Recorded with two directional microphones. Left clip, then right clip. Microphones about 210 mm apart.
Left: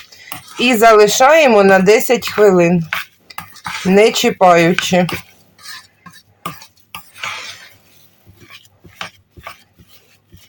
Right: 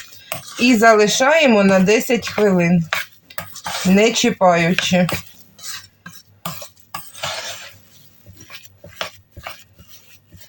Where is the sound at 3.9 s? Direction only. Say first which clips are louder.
Left 5 dB; 40° left (ahead or behind).